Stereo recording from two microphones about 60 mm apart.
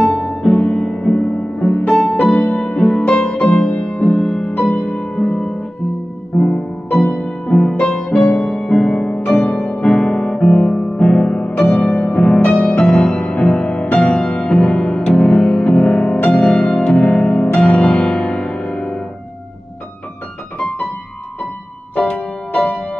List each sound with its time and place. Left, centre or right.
0.0 s music: centre
4.7 s harp: centre
6.3 s music: centre
12.8 s music: centre
22.5 s music: left